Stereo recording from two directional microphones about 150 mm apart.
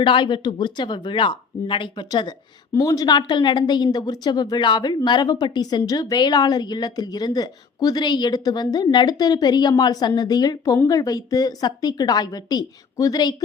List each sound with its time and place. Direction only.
0.0 s a woman's voice: 35° left (ahead or behind)